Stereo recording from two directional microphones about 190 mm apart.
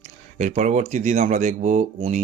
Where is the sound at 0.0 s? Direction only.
40° right (ahead or behind).